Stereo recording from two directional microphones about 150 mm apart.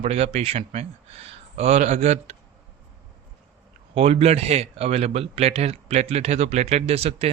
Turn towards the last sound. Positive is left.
turn(degrees=-40)  # may be behind; listen again after turning